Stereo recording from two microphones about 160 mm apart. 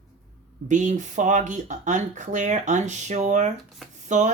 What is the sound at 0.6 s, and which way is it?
Speech, 50° right (ahead or behind).